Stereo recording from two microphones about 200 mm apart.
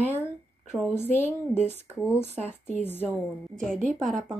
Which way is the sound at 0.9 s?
10° left (ahead or behind).